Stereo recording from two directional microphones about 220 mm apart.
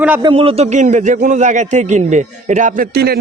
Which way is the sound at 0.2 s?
25° right (ahead or behind).